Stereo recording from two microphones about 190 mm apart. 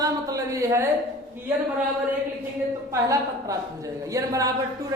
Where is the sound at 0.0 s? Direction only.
20° right (ahead or behind).